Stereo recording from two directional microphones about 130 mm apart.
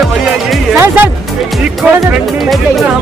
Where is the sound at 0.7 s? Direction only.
15° right (ahead or behind).